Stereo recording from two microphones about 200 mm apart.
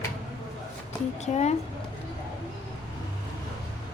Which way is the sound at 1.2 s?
35° left (ahead or behind).